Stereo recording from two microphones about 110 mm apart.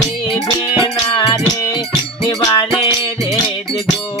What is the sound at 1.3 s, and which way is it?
Music, 35° left (ahead or behind).